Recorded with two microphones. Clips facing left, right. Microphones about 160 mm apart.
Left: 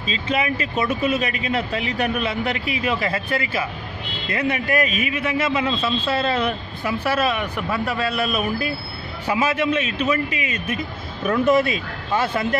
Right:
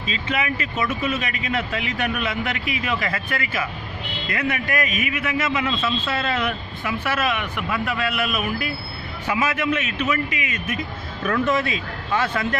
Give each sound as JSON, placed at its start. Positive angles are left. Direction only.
{"t": 0.0, "sound": "a man's voice", "side_deg": 35}
{"t": 11.2, "sound": "speech", "side_deg": 15}